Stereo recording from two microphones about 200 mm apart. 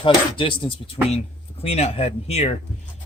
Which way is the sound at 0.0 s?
25° left (ahead or behind).